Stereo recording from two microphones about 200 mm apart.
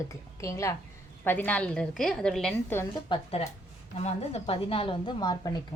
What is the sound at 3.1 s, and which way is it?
A woman's voice, 30° left (ahead or behind).